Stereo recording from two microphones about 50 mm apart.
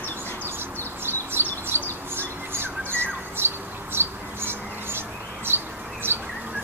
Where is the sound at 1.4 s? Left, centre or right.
Right.